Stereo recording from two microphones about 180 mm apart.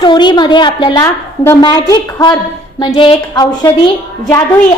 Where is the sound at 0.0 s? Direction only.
25° left (ahead or behind).